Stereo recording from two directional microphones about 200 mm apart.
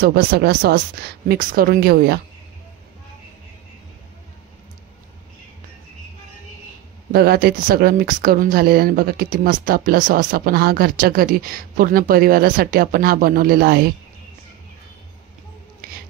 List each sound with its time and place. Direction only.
0.0 s speech: 50° right (ahead or behind)
7.1 s speech: 50° right (ahead or behind)
15.8 s a sound: 45° right (ahead or behind)